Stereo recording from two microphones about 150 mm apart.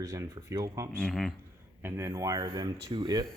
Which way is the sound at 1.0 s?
Centre (ahead or behind).